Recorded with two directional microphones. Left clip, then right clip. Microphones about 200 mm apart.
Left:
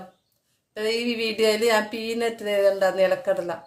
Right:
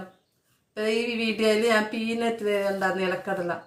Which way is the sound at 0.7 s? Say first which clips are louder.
Left 1 dB; 50° left (ahead or behind).